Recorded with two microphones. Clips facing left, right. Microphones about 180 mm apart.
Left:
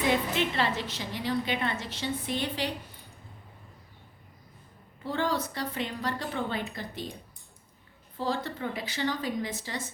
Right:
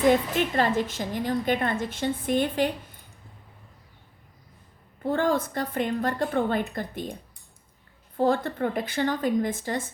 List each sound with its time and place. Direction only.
0.0 s a woman's voice: 45° right (ahead or behind)
5.0 s a woman's voice: 50° right (ahead or behind)
8.1 s a woman's voice: 50° right (ahead or behind)